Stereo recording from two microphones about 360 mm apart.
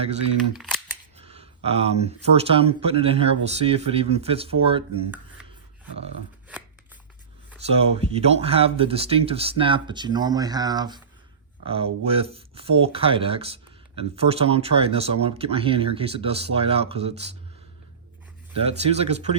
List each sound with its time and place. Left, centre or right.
0.5 s speech: centre
1.2 s speech: centre
7.6 s speech: centre
18.6 s speech: centre